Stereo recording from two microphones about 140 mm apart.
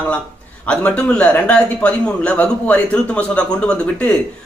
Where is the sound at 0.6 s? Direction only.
10° left (ahead or behind).